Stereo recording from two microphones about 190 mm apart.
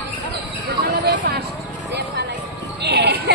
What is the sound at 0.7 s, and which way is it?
Music, 60° right (ahead or behind).